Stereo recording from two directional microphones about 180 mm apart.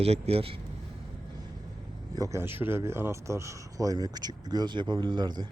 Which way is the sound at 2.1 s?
20° right (ahead or behind).